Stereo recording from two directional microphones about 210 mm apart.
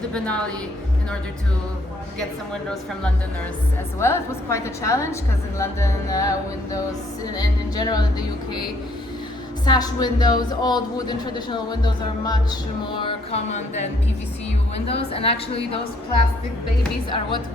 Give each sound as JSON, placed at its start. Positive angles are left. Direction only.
{"t": 0.1, "sound": "a woman's voice", "side_deg": 5}
{"t": 4.0, "sound": "music", "side_deg": 15}
{"t": 7.3, "sound": "a man's voice", "side_deg": 20}
{"t": 9.6, "sound": "a man's voice", "side_deg": 20}
{"t": 13.0, "sound": "a sound", "side_deg": 25}
{"t": 14.8, "sound": "a man's voice", "side_deg": 30}